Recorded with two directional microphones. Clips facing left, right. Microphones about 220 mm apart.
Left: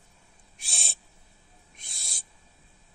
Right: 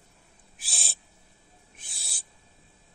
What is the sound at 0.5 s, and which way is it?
Owl, centre (ahead or behind).